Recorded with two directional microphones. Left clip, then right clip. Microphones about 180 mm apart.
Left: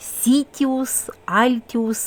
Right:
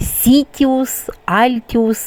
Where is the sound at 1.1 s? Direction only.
25° right (ahead or behind).